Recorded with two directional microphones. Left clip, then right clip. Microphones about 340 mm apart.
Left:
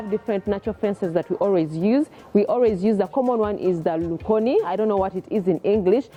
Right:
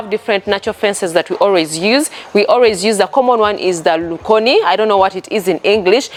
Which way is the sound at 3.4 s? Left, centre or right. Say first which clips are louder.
Right 9 dB; centre.